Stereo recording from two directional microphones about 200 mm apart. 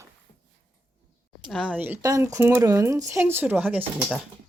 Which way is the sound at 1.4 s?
5° right (ahead or behind).